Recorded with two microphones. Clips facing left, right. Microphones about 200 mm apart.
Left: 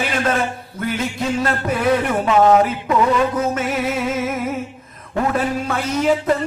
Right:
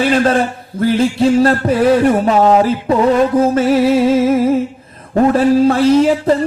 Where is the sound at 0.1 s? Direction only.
35° right (ahead or behind).